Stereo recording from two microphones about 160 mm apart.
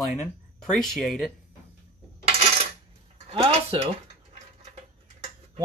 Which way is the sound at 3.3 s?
35° right (ahead or behind).